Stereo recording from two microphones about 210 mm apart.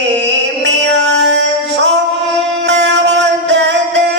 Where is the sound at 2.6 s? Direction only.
55° right (ahead or behind).